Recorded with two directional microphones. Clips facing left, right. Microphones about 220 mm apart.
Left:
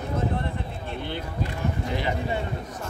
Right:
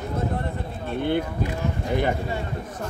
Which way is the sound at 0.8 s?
55° right (ahead or behind).